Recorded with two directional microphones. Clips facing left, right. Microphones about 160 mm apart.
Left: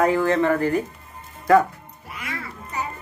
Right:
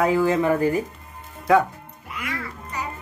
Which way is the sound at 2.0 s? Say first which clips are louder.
Right 2 dB; 30° left (ahead or behind).